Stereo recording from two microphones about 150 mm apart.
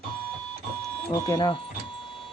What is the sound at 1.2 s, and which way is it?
Speech, 25° left (ahead or behind).